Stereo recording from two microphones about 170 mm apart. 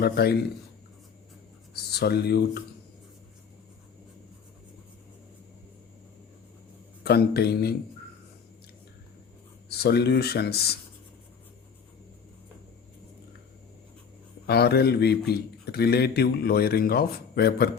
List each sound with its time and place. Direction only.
0.0 s speech: 70° left (ahead or behind)
1.7 s speech: 70° left (ahead or behind)
7.0 s speech: 70° left (ahead or behind)
9.6 s speech: 70° left (ahead or behind)
14.4 s speech: 70° left (ahead or behind)